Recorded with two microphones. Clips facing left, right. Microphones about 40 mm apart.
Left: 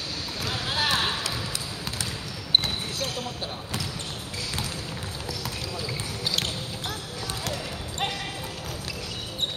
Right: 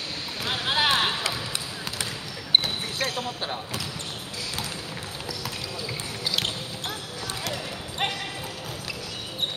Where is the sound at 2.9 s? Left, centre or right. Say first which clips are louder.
Right 3 dB; right.